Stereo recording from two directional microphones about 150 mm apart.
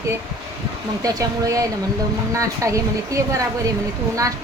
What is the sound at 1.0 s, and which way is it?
Speech, 20° right (ahead or behind).